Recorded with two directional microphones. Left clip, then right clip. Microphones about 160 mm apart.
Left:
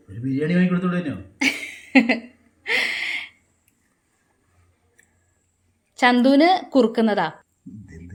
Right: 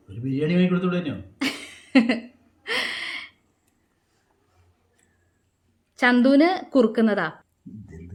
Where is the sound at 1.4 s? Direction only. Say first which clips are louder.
Left 8 dB; centre (ahead or behind).